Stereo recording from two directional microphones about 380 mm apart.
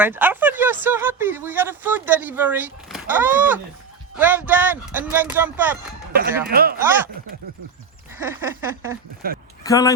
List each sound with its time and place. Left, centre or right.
0.0 s speech: centre
6.5 s speech: right
6.7 s speech: centre
8.1 s a sound: centre
9.2 s speech: right
9.6 s speech: centre